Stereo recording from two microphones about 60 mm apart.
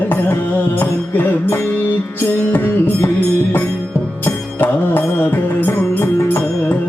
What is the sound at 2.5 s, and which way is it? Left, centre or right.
Music, left.